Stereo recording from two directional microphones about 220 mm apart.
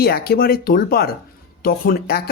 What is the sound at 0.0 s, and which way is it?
Speech, 45° left (ahead or behind).